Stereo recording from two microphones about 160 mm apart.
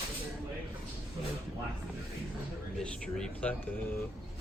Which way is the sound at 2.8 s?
5° left (ahead or behind).